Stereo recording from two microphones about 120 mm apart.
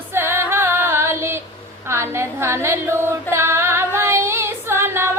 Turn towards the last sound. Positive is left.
turn(degrees=-20)  # may be behind; listen again after turning